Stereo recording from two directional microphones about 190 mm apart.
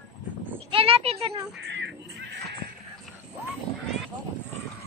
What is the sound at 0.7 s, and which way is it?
Speech, 30° right (ahead or behind).